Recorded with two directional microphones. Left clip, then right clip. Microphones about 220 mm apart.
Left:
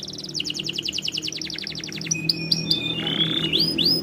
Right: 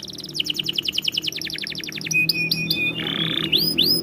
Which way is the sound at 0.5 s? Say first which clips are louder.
Right 6 dB; 15° right (ahead or behind).